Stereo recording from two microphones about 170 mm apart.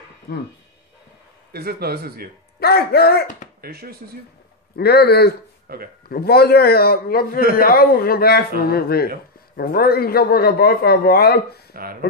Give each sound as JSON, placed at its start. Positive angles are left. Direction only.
{"t": 1.5, "sound": "a man's voice", "side_deg": -65}
{"t": 2.6, "sound": "speech", "side_deg": 65}
{"t": 3.6, "sound": "a man's voice", "side_deg": -65}
{"t": 4.7, "sound": "speech", "side_deg": 70}
{"t": 5.7, "sound": "speech", "side_deg": -65}
{"t": 6.0, "sound": "a man's voice", "side_deg": 65}
{"t": 11.7, "sound": "speech", "side_deg": -60}